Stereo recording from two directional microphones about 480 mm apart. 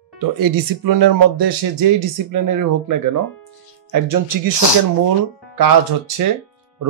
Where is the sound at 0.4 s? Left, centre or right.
Right.